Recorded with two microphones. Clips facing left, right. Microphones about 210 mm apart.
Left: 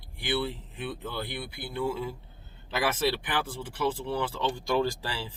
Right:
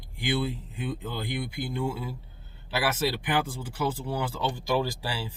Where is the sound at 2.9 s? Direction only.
10° right (ahead or behind).